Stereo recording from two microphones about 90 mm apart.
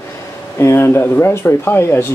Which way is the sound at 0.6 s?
30° left (ahead or behind).